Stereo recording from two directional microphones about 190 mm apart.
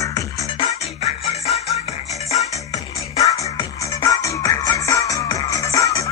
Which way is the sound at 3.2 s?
35° left (ahead or behind).